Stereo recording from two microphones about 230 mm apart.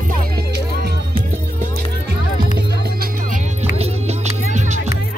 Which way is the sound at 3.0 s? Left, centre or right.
Right.